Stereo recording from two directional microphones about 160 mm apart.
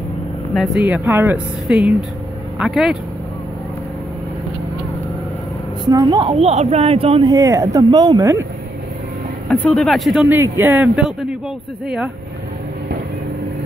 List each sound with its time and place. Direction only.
0.8 s speech: 10° right (ahead or behind)
5.9 s speech: 25° right (ahead or behind)
9.5 s speech: 10° left (ahead or behind)
10.2 s speech: 10° right (ahead or behind)